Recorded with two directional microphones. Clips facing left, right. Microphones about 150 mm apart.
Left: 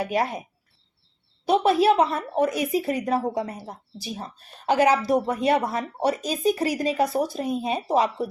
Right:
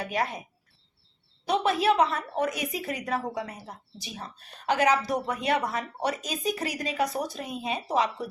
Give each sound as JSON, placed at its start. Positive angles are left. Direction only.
{"t": 0.0, "sound": "a woman's voice", "side_deg": 30}
{"t": 1.5, "sound": "a woman's voice", "side_deg": 30}